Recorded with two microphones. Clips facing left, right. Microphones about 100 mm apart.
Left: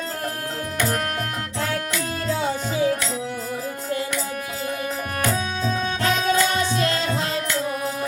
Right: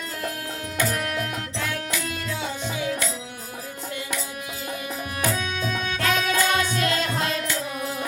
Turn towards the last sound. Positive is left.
turn(degrees=30)  # may be behind; listen again after turning